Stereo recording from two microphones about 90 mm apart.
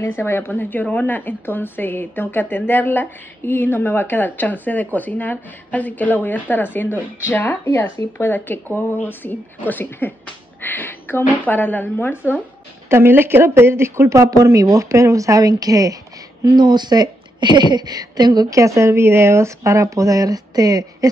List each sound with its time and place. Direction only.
0.0 s speech: 30° left (ahead or behind)
12.9 s speech: 25° right (ahead or behind); by 16.0 s 40° right (ahead or behind)
16.4 s a woman's voice: 55° right (ahead or behind)